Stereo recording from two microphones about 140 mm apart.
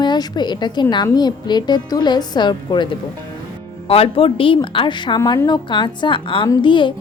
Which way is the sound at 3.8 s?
45° left (ahead or behind).